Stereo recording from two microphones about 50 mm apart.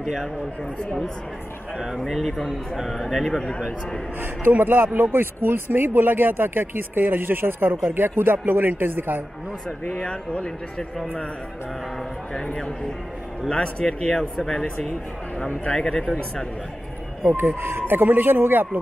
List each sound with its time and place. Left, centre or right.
0.0 s speech: centre
2.0 s speech: centre
4.2 s speech: right
9.8 s speech: left
12.4 s speech: centre
14.1 s speech: centre
17.5 s speech: right